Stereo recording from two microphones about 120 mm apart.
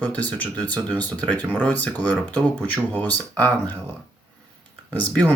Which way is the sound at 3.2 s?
15° left (ahead or behind).